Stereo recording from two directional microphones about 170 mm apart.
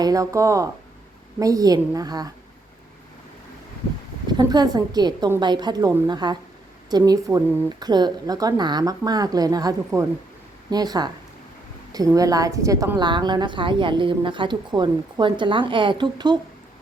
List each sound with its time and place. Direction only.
0.0 s a woman's voice: 20° right (ahead or behind)
4.3 s a woman's voice: 25° right (ahead or behind)